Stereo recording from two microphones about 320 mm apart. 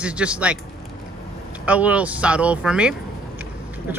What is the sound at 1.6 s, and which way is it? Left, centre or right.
Speech, centre.